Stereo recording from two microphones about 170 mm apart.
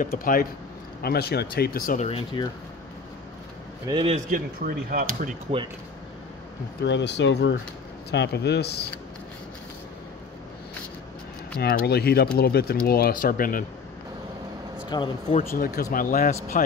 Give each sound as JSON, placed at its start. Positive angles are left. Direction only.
{"t": 0.2, "sound": "speech", "side_deg": 55}
{"t": 1.0, "sound": "speech", "side_deg": 70}
{"t": 2.0, "sound": "speech", "side_deg": 30}
{"t": 3.8, "sound": "a man's voice", "side_deg": -25}
{"t": 4.3, "sound": "speech", "side_deg": -55}
{"t": 6.8, "sound": "speech", "side_deg": 90}
{"t": 8.1, "sound": "speech", "side_deg": 80}
{"t": 11.5, "sound": "speech", "side_deg": 65}
{"t": 14.9, "sound": "speech", "side_deg": 25}
{"t": 15.2, "sound": "speech", "side_deg": 50}